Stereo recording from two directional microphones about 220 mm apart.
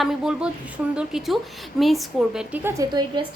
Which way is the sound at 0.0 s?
Centre (ahead or behind).